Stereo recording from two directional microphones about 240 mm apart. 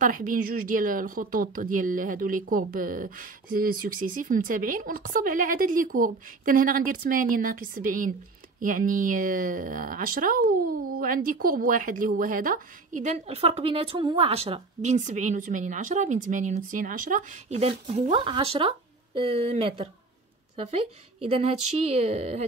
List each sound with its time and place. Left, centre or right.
0.0 s a woman's voice: right